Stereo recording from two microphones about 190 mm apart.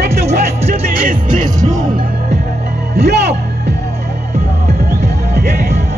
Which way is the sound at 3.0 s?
60° right (ahead or behind).